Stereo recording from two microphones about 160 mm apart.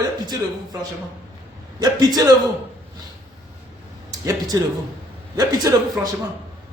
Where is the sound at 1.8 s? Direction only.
25° right (ahead or behind).